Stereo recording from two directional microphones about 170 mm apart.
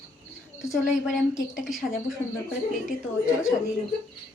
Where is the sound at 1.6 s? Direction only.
Centre (ahead or behind).